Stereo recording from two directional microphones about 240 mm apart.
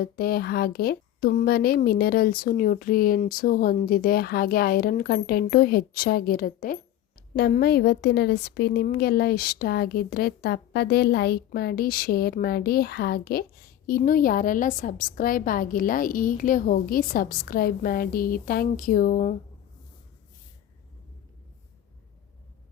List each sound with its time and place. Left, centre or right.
0.0 s a woman's voice: left